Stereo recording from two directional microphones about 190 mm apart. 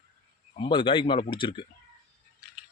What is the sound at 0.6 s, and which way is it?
A man's voice, 25° left (ahead or behind).